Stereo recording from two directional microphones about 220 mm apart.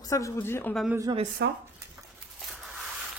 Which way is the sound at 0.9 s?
15° right (ahead or behind).